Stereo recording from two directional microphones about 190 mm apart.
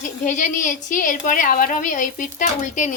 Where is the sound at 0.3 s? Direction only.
40° left (ahead or behind).